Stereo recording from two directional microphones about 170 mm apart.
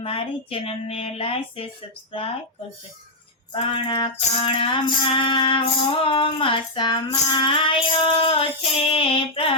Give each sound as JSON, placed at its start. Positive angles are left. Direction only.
{"t": 0.0, "sound": "child singing", "side_deg": 35}
{"t": 3.5, "sound": "music", "side_deg": 30}
{"t": 6.0, "sound": "child singing", "side_deg": 30}